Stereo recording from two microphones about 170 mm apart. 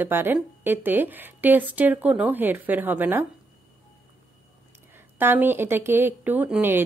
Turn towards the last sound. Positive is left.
turn(degrees=-10)  # may be behind; listen again after turning